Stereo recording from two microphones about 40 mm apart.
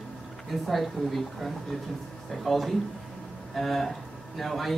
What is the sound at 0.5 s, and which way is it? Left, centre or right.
A man's voice, centre.